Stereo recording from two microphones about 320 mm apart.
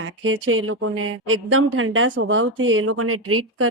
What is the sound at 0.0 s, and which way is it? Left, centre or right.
Speech, right.